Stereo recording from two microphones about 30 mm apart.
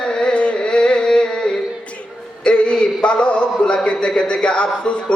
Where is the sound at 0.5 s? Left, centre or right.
Left.